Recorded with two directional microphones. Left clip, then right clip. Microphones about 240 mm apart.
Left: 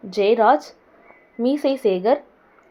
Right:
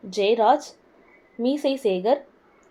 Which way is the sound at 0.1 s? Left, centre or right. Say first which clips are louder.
Left 3 dB; left.